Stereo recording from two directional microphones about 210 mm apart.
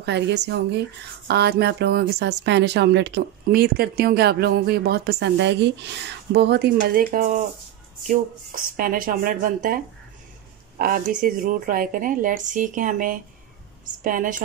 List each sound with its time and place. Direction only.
0.0 s a woman's voice: 55° right (ahead or behind)
10.8 s a woman's voice: 40° right (ahead or behind)